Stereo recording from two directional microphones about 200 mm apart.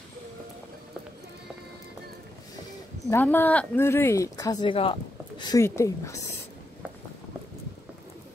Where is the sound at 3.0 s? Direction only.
10° left (ahead or behind).